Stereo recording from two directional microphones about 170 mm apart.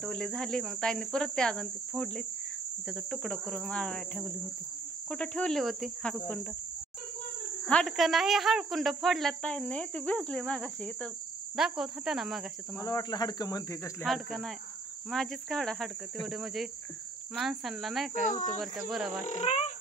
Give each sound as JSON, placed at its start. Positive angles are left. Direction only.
{"t": 0.0, "sound": "speech", "side_deg": 5}
{"t": 6.1, "sound": "cricket", "side_deg": 10}
{"t": 7.6, "sound": "speech", "side_deg": 5}
{"t": 12.8, "sound": "cricket", "side_deg": 25}
{"t": 14.0, "sound": "speech", "side_deg": 0}
{"t": 18.2, "sound": "speech", "side_deg": 45}
{"t": 18.6, "sound": "speech", "side_deg": 0}
{"t": 19.1, "sound": "speech", "side_deg": 45}